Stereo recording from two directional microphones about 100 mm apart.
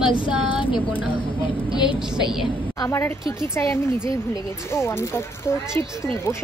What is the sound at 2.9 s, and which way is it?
Speech, 30° left (ahead or behind).